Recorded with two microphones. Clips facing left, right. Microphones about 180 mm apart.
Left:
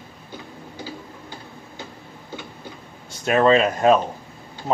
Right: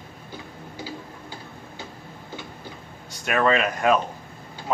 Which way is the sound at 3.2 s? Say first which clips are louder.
Left 5 dB; 30° left (ahead or behind).